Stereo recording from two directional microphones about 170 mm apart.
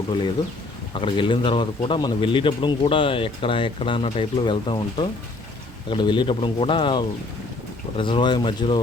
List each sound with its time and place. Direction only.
1.0 s speech: 30° left (ahead or behind)